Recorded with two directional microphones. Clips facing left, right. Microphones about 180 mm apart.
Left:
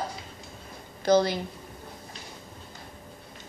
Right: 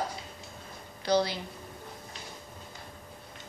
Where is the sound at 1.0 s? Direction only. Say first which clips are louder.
Left 5 dB; 45° left (ahead or behind).